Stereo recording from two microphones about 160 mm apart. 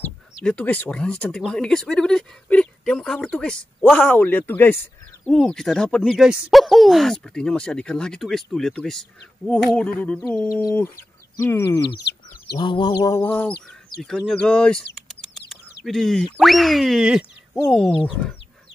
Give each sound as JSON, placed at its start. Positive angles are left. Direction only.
{"t": 0.0, "sound": "speech", "side_deg": 5}
{"t": 9.5, "sound": "a sound", "side_deg": 5}
{"t": 11.3, "sound": "a sound", "side_deg": 15}
{"t": 12.5, "sound": "chicken", "side_deg": 30}
{"t": 14.0, "sound": "speech", "side_deg": 5}
{"t": 15.0, "sound": "chirp", "side_deg": 0}
{"t": 16.3, "sound": "speech", "side_deg": 0}